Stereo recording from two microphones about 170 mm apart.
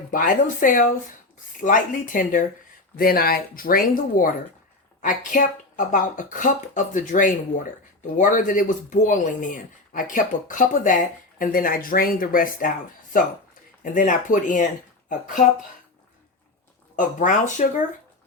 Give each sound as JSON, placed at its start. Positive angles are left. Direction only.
{"t": 0.1, "sound": "speech", "side_deg": 50}
{"t": 13.9, "sound": "speech", "side_deg": 50}
{"t": 16.9, "sound": "speech", "side_deg": 50}